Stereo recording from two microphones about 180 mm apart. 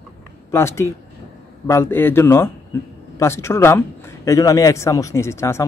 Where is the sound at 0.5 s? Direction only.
15° left (ahead or behind).